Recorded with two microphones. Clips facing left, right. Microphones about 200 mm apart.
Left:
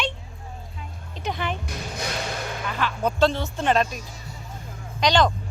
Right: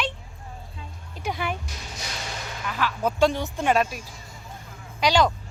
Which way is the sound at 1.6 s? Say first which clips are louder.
Left 7 dB; 60° left (ahead or behind).